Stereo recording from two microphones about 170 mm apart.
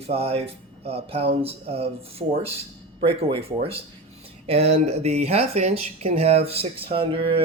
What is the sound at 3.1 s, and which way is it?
Speech, 35° right (ahead or behind).